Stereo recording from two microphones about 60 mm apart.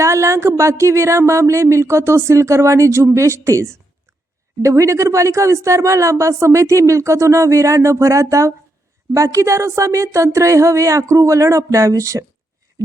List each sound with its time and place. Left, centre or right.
0.0 s speech: right